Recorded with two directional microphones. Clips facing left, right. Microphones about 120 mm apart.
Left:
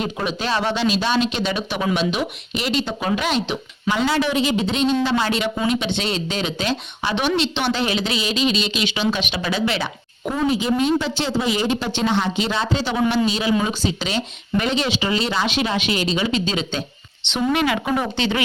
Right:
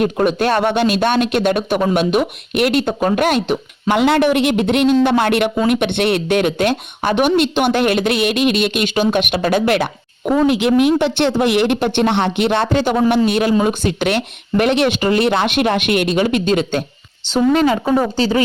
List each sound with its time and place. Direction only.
0.0 s speech: 55° right (ahead or behind)
17.2 s speech: 40° right (ahead or behind)